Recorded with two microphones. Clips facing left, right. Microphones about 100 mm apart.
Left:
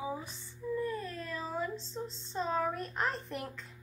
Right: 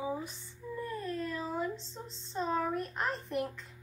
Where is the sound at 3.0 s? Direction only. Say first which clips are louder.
Left 1 dB; 10° right (ahead or behind).